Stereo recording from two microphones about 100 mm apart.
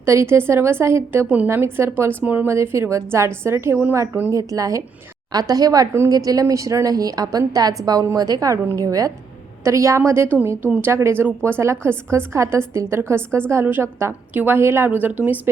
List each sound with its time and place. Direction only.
0.0 s a woman's voice: 25° right (ahead or behind)
2.5 s a woman's voice: 30° right (ahead or behind)